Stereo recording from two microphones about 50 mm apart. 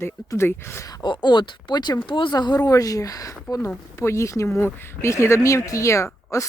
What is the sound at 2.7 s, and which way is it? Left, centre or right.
Speech, left.